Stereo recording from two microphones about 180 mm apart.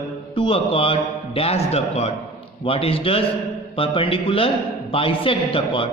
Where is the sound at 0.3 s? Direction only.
30° left (ahead or behind).